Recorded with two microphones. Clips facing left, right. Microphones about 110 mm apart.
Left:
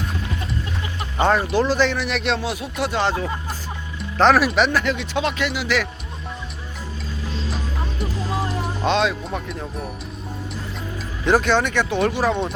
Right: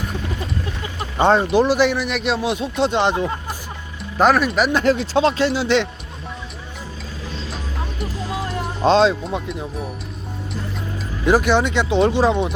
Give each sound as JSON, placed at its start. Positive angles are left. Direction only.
{"t": 1.2, "sound": "speech", "side_deg": -25}
{"t": 2.0, "sound": "speech", "side_deg": 0}
{"t": 2.4, "sound": "speech", "side_deg": -25}
{"t": 4.2, "sound": "speech", "side_deg": 0}
{"t": 4.8, "sound": "speech", "side_deg": -35}
{"t": 7.5, "sound": "music", "side_deg": 0}
{"t": 8.8, "sound": "speech", "side_deg": -30}
{"t": 11.3, "sound": "speech", "side_deg": -10}